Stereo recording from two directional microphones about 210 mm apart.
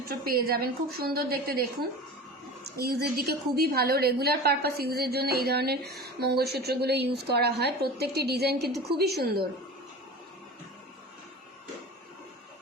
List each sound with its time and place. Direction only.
0.3 s a woman's voice: 45° right (ahead or behind)